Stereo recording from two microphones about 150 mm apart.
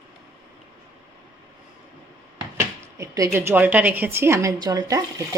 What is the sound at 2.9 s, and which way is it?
A woman's voice, 20° right (ahead or behind).